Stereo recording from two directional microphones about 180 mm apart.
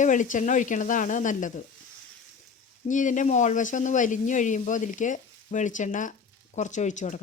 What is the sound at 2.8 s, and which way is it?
Speech, 45° left (ahead or behind).